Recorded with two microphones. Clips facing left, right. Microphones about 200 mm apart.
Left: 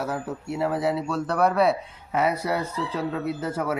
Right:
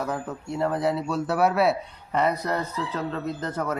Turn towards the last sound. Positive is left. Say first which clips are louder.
# left 2 dB
turn(degrees=10)  # may be behind; listen again after turning